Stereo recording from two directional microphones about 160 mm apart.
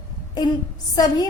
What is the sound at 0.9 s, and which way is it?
Speech, 25° left (ahead or behind).